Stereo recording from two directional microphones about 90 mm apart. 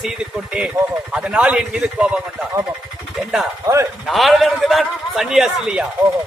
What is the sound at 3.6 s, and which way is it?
Speech, 35° right (ahead or behind).